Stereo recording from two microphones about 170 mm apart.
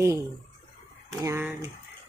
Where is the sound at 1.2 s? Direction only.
15° right (ahead or behind).